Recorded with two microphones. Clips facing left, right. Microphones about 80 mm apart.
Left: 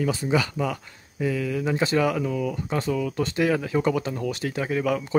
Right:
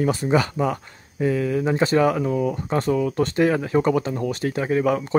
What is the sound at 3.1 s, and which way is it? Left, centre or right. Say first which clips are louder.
Speech: right 4 dB; right.